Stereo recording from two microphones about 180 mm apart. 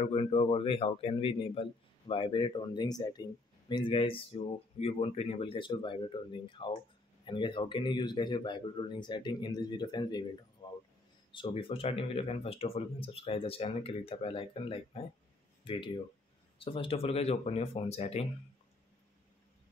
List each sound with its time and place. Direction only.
0.0 s speech: 30° left (ahead or behind)
11.3 s speech: 30° left (ahead or behind)